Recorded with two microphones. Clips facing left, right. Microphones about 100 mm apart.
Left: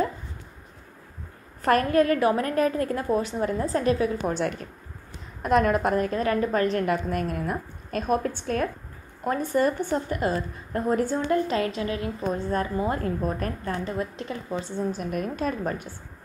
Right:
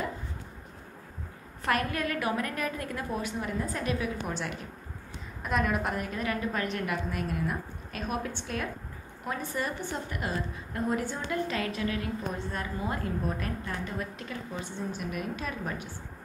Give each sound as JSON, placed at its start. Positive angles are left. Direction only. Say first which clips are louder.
{"t": 1.6, "sound": "a woman's voice", "louder": "left 9 dB", "side_deg": 40}
{"t": 11.4, "sound": "a woman's voice", "louder": "left 5 dB", "side_deg": 25}
{"t": 12.4, "sound": "a woman's voice", "louder": "left 8 dB", "side_deg": 40}
{"t": 13.8, "sound": "a woman's voice", "louder": "left 6 dB", "side_deg": 25}
{"t": 14.9, "sound": "a woman's voice", "louder": "left 6 dB", "side_deg": 40}